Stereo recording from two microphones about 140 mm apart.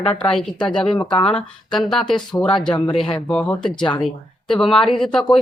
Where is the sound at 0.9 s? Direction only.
35° left (ahead or behind).